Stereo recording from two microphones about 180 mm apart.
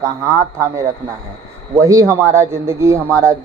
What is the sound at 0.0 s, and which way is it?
Speech, 15° right (ahead or behind).